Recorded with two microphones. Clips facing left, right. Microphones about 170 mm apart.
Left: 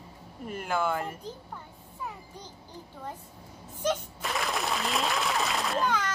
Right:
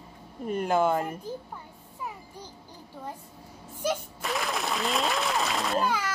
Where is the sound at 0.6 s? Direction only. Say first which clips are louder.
Right 5 dB; 35° right (ahead or behind).